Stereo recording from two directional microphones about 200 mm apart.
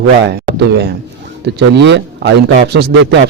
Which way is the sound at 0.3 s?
55° right (ahead or behind).